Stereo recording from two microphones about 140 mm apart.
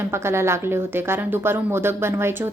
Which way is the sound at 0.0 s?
20° right (ahead or behind).